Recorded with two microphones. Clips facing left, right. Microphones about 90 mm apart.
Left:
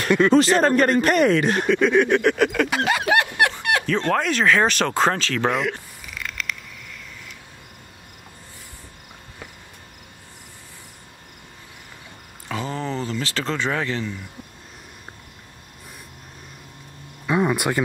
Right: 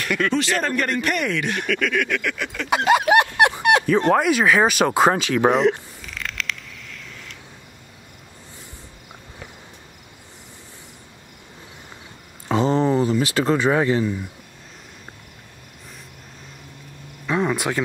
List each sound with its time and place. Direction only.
0.0 s speech: 30° left (ahead or behind); by 2.7 s 50° left (ahead or behind)
2.7 s speech: 20° right (ahead or behind)
5.5 s speech: 25° right (ahead or behind)
6.0 s frog: 5° left (ahead or behind)
12.4 s a sound: 25° right (ahead or behind)
17.3 s speech: 5° left (ahead or behind)